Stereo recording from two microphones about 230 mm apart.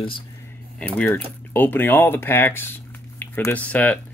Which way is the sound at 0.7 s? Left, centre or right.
Centre.